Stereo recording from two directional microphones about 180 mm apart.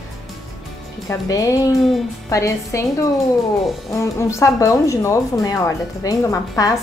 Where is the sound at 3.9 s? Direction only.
15° left (ahead or behind).